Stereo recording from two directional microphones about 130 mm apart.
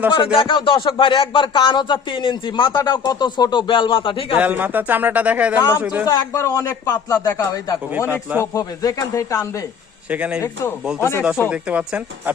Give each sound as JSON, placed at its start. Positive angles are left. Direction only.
{"t": 0.2, "sound": "speech", "side_deg": 40}
{"t": 4.4, "sound": "a man's voice", "side_deg": -10}
{"t": 6.1, "sound": "a man's voice", "side_deg": 25}
{"t": 7.9, "sound": "a man's voice", "side_deg": -15}
{"t": 8.5, "sound": "a man's voice", "side_deg": 30}
{"t": 10.1, "sound": "a man's voice", "side_deg": -10}
{"t": 10.4, "sound": "a man's voice", "side_deg": 20}
{"t": 11.4, "sound": "a man's voice", "side_deg": -10}